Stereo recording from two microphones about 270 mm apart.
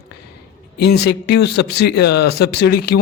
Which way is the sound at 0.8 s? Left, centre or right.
Left.